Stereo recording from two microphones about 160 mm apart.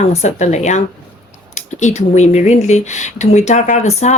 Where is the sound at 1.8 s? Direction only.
45° left (ahead or behind).